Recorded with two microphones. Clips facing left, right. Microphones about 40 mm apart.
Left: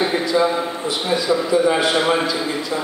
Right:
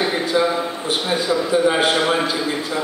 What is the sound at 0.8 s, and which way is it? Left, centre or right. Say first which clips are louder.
A man's voice: left 1 dB; right.